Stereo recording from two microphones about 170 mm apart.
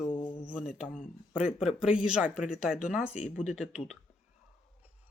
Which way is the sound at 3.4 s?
45° left (ahead or behind).